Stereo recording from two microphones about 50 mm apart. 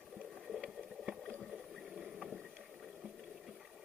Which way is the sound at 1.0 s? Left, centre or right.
Centre.